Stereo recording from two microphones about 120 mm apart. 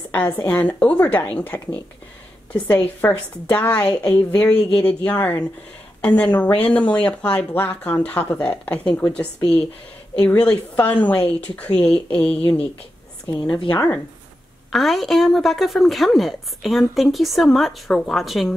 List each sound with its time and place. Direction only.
0.5 s speech: 15° left (ahead or behind)
13.3 s a woman's voice: 40° left (ahead or behind)
14.7 s a woman's voice: centre (ahead or behind)